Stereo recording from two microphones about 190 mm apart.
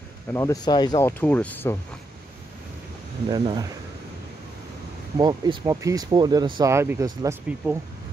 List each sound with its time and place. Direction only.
0.3 s speech: 15° left (ahead or behind)
3.3 s speech: 20° right (ahead or behind)
5.1 s speech: 20° right (ahead or behind)